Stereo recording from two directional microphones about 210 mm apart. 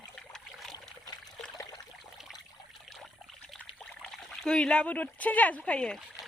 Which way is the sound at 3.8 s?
Centre (ahead or behind).